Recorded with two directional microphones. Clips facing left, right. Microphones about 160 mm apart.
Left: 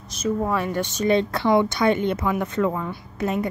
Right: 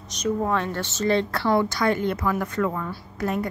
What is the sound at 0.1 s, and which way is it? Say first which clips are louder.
A woman's voice: left 1 dB; 5° left (ahead or behind).